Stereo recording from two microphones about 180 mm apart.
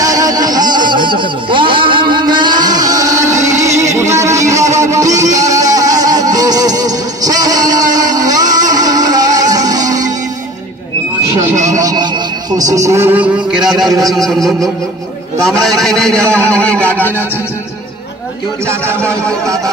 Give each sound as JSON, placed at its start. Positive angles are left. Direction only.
{"t": 0.0, "sound": "music", "side_deg": -20}
{"t": 11.6, "sound": "music", "side_deg": -20}
{"t": 15.4, "sound": "a man's voice", "side_deg": 0}
{"t": 16.2, "sound": "a man's voice", "side_deg": -15}
{"t": 16.6, "sound": "music", "side_deg": 10}
{"t": 18.7, "sound": "a man's voice", "side_deg": -15}